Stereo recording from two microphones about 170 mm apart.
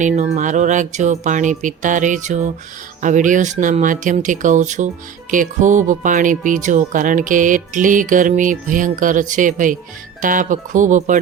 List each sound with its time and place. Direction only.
0.0 s speech: 45° right (ahead or behind)